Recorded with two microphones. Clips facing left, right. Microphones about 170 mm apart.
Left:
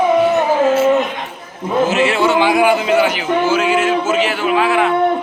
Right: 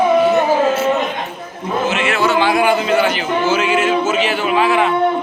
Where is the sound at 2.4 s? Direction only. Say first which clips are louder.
Left 1 dB; 10° left (ahead or behind).